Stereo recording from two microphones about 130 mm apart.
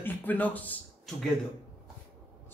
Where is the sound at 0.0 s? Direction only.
15° left (ahead or behind).